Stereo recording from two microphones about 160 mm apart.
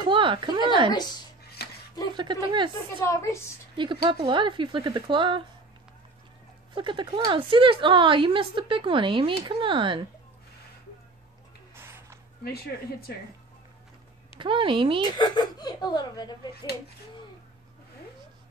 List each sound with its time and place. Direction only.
0.0 s speech: 30° right (ahead or behind)
1.6 s a sound: 80° left
2.1 s speech: 30° right (ahead or behind)
3.0 s a woman's voice: 15° left (ahead or behind)
3.7 s speech: 30° right (ahead or behind)
6.7 s a woman's voice: 30° right (ahead or behind)
11.7 s a sound: 15° right (ahead or behind)
12.4 s speech: 75° left (ahead or behind)
14.4 s a woman's voice: 30° right (ahead or behind)
15.0 s a woman's voice: 25° left (ahead or behind)